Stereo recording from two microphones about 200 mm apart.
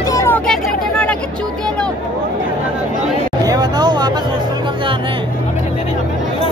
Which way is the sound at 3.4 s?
20° right (ahead or behind).